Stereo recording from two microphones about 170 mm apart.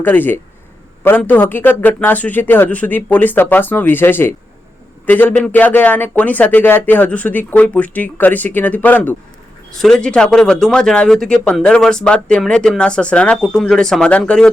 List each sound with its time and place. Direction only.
0.0 s speech: 10° left (ahead or behind)